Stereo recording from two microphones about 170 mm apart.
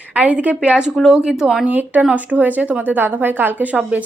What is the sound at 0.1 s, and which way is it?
Speech, 5° right (ahead or behind).